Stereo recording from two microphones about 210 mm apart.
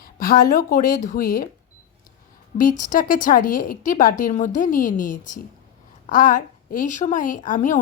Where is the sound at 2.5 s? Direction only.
40° left (ahead or behind).